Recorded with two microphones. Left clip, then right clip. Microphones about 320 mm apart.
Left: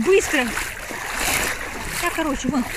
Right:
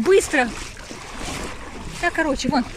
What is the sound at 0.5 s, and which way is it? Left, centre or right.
Splash, left.